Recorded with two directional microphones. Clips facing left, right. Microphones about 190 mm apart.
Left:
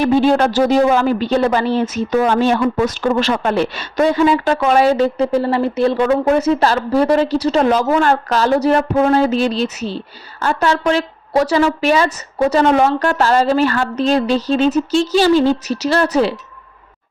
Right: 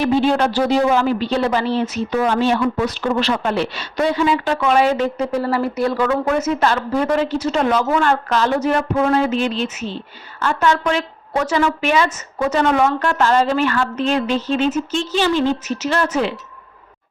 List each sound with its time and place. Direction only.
0.0 s speech: 45° left (ahead or behind)